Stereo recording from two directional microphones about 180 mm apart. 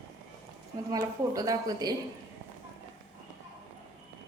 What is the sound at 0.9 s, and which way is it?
A woman's voice, 20° right (ahead or behind).